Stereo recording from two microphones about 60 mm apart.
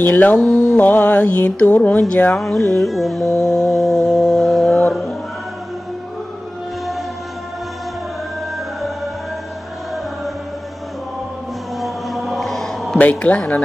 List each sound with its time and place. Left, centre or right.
0.0 s speech: left
2.3 s a sound: centre
3.3 s mantra: left
3.6 s a sound: centre
11.8 s mantra: centre
13.1 s speech: centre